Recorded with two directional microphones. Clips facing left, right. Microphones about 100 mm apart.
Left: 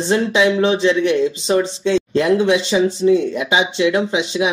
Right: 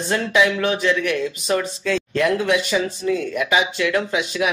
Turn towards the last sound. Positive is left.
turn(degrees=25)  # may be behind; listen again after turning